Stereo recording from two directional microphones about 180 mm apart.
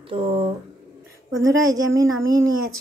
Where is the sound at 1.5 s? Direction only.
20° right (ahead or behind).